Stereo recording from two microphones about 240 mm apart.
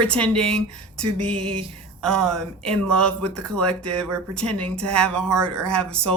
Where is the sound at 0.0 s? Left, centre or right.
Centre.